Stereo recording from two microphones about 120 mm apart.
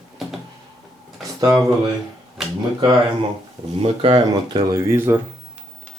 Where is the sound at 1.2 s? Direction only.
30° right (ahead or behind).